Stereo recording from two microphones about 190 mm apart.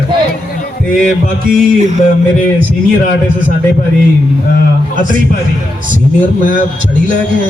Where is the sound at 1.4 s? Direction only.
45° right (ahead or behind).